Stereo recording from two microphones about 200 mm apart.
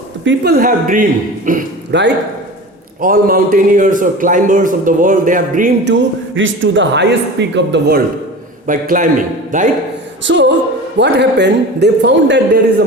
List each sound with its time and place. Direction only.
0.3 s a man's voice: 50° right (ahead or behind)
1.9 s speech: 60° right (ahead or behind)
3.0 s a man's voice: 45° right (ahead or behind)
5.8 s speech: 65° right (ahead or behind)
8.6 s a man's voice: 40° right (ahead or behind)
10.2 s speech: 60° right (ahead or behind)